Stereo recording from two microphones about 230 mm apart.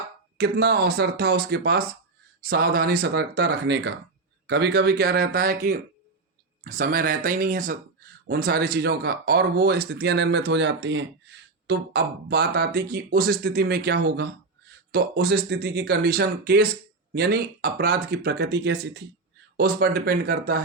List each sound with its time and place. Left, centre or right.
0.3 s speech: right